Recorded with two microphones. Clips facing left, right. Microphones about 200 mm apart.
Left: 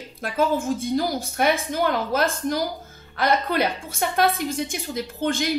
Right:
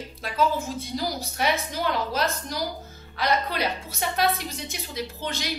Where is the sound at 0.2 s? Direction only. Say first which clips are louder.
Left 3 dB; 50° left (ahead or behind).